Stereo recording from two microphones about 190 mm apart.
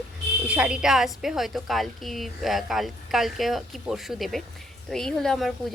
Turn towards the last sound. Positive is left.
turn(degrees=0)  # may be behind; listen again after turning